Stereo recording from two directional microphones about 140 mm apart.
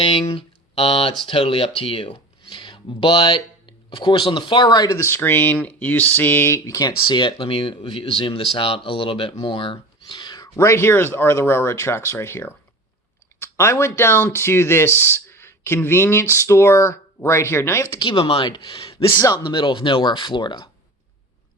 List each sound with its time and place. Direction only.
0.0 s speech: 40° left (ahead or behind); by 17.8 s 15° left (ahead or behind)
18.0 s speech: 40° left (ahead or behind)
19.1 s speech: 25° left (ahead or behind)